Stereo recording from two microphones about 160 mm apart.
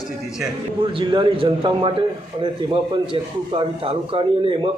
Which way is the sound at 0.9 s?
30° right (ahead or behind).